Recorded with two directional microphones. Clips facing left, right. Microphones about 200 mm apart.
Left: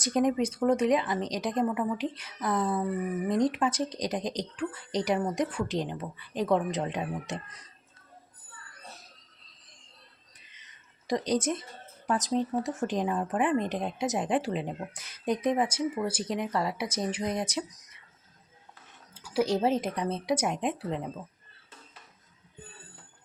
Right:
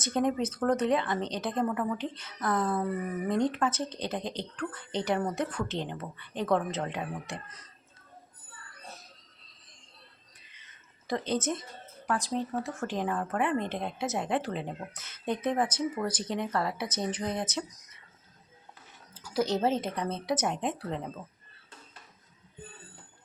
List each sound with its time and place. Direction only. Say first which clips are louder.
0.3 s speech: left 2 dB; 15° left (ahead or behind)
11.3 s speech: left 2 dB; 10° left (ahead or behind)
19.3 s speech: left 2 dB; 10° left (ahead or behind)